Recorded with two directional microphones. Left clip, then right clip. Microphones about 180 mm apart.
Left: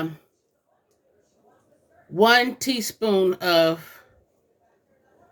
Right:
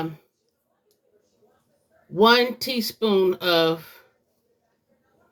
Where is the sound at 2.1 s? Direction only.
30° left (ahead or behind).